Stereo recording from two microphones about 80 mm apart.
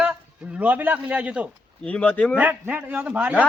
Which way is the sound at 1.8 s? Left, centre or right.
Centre.